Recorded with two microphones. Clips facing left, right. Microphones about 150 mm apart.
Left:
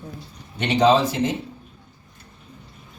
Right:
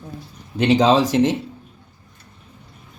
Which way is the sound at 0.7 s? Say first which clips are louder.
Right 1 dB; 90° right.